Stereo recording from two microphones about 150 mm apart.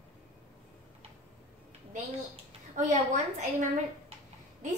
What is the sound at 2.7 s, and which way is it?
A woman's voice, 55° right (ahead or behind).